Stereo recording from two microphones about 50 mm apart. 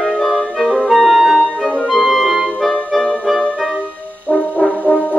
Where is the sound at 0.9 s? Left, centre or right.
Centre.